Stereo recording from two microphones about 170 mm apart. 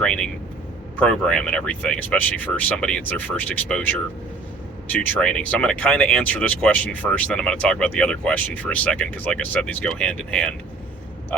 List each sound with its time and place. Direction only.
0.0 s speech: 5° left (ahead or behind)